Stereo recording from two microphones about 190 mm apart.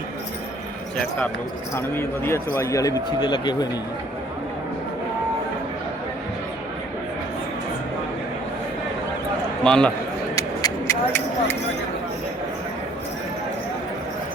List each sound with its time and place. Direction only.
1.7 s speech: 15° left (ahead or behind)
9.6 s a man's voice: 5° left (ahead or behind)
10.3 s a sound: 15° left (ahead or behind)